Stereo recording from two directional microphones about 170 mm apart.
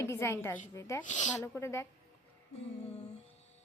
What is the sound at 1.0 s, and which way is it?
Speech, 45° left (ahead or behind).